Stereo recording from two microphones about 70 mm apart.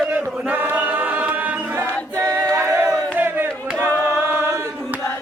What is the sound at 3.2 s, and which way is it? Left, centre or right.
Choir, right.